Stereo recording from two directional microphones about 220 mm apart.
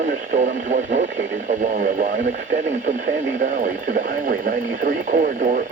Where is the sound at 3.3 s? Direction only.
35° right (ahead or behind).